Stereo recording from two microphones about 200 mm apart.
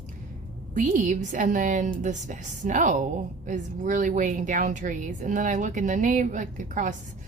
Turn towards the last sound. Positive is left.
turn(degrees=-40)  # may be behind; listen again after turning